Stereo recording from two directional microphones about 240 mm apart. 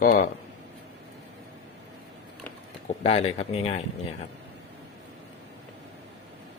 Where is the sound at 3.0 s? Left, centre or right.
Left.